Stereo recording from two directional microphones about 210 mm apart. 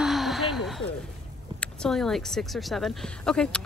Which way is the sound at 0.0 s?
Centre (ahead or behind).